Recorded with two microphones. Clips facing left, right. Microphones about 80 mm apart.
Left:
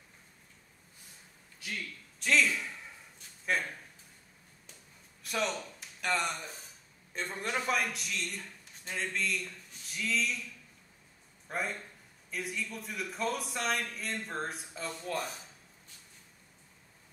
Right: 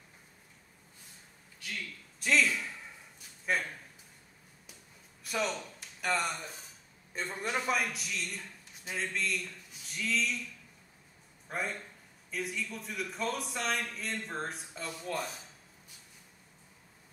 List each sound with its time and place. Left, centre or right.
2.1 s a sound: centre
5.2 s a man's voice: centre
11.4 s a man's voice: centre